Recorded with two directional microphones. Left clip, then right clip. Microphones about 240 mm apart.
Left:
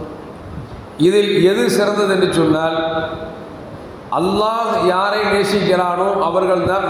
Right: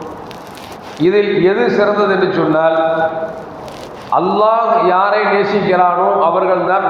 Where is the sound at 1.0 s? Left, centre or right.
Left.